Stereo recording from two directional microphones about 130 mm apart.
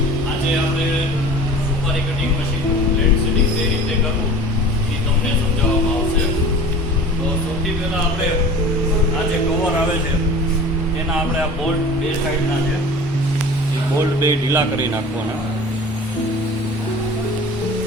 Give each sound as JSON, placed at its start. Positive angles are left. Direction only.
{"t": 14.2, "sound": "speech", "side_deg": -20}